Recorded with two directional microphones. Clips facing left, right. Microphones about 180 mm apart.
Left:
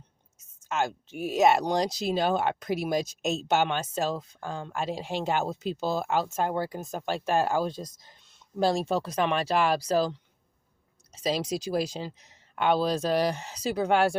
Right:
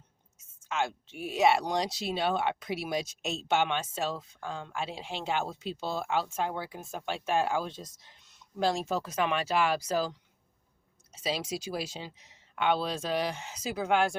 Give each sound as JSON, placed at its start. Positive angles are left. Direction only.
{"t": 1.1, "sound": "speech", "side_deg": 45}